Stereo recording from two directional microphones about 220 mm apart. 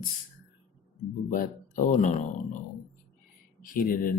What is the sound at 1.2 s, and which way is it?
Speech, 35° left (ahead or behind).